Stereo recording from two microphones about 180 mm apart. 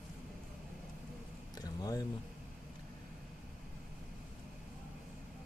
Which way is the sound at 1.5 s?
20° left (ahead or behind).